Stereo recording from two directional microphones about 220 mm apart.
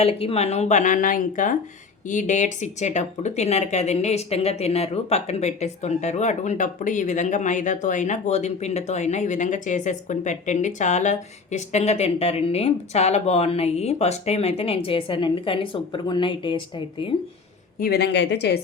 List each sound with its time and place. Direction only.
0.0 s a woman's voice: 25° left (ahead or behind)
17.7 s speech: 45° left (ahead or behind)